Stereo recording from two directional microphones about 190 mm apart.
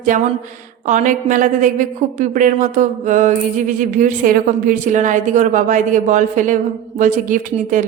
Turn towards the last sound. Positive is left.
turn(degrees=-45)  # may be behind; listen again after turning